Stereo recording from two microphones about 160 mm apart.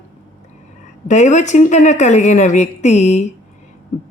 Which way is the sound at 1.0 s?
50° left (ahead or behind).